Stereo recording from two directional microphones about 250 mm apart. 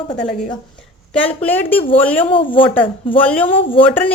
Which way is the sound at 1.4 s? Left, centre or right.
Centre.